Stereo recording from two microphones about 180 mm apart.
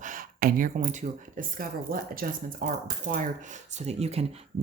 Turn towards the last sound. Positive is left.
turn(degrees=-35)  # may be behind; listen again after turning